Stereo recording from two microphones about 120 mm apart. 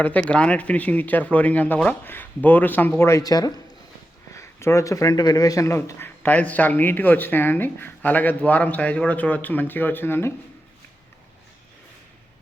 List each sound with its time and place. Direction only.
0.0 s speech: 10° left (ahead or behind)
3.0 s speech: 25° left (ahead or behind)